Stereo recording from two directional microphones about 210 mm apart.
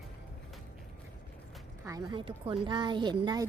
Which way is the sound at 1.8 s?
15° right (ahead or behind).